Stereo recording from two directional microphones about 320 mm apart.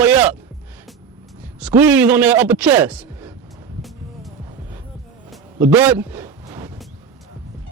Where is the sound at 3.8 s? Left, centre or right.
Centre.